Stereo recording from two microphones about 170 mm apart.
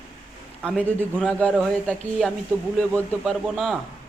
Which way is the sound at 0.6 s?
5° left (ahead or behind).